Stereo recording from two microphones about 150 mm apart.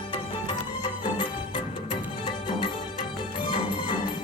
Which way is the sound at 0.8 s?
30° left (ahead or behind).